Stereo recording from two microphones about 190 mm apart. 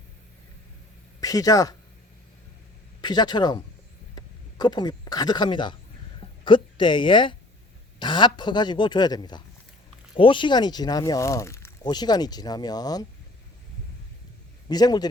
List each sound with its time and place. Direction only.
1.2 s speech: 20° left (ahead or behind)
3.0 s a woman's voice: 20° left (ahead or behind)
14.7 s speech: 20° left (ahead or behind)